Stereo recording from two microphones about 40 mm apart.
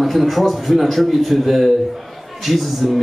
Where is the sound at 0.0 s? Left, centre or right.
Centre.